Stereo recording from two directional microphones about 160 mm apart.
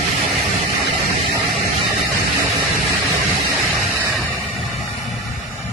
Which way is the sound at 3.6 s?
Centre (ahead or behind).